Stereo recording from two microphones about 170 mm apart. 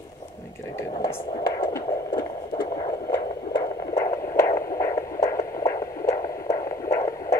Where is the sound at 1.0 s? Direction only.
20° left (ahead or behind).